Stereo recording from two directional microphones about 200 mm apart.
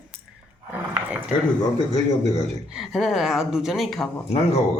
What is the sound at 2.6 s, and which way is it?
Speech, centre (ahead or behind).